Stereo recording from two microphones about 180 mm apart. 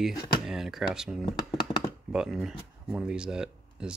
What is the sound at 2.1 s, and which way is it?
Speech, 5° right (ahead or behind).